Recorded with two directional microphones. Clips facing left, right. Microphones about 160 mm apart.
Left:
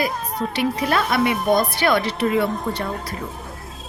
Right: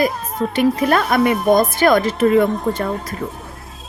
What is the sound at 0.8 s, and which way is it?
Speech, 50° right (ahead or behind).